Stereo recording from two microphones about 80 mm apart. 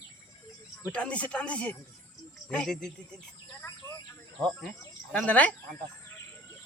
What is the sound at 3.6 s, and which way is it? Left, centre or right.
Bird, left.